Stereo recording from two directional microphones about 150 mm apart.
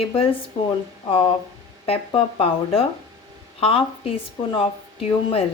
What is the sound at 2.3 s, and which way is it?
Speech, 40° left (ahead or behind).